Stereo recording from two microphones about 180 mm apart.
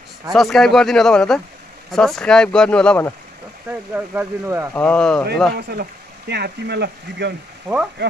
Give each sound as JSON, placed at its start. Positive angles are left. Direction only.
{"t": 0.3, "sound": "speech", "side_deg": 0}
{"t": 3.9, "sound": "speech", "side_deg": -10}
{"t": 4.7, "sound": "speech", "side_deg": 5}
{"t": 5.6, "sound": "speech", "side_deg": -65}
{"t": 7.7, "sound": "speech", "side_deg": -5}